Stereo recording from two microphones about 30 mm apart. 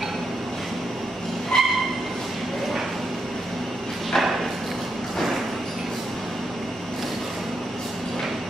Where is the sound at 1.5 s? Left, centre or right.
Centre.